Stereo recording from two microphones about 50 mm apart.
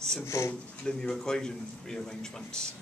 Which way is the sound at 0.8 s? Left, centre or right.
Centre.